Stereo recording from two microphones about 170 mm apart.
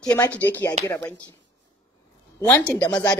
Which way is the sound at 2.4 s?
20° left (ahead or behind).